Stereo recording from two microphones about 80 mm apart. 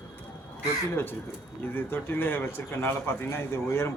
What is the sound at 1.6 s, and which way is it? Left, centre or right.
A man's voice, left.